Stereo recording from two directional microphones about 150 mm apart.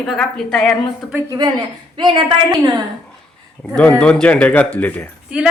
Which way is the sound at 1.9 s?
30° right (ahead or behind).